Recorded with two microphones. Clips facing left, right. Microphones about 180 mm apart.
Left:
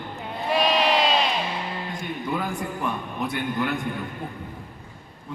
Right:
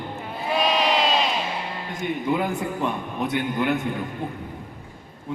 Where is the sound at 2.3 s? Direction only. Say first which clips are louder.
Right 2 dB; 20° right (ahead or behind).